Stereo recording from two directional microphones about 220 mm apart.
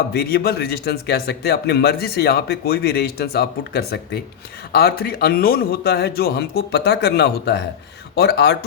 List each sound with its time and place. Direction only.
0.1 s a man's voice: 45° left (ahead or behind)